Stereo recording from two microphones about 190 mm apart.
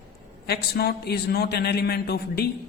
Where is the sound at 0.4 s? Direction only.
55° left (ahead or behind).